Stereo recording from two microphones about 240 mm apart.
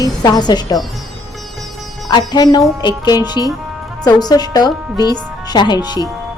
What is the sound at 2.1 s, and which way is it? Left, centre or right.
Speech, centre.